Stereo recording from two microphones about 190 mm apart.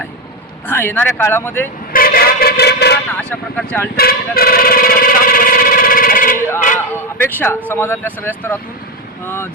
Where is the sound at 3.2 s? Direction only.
5° left (ahead or behind).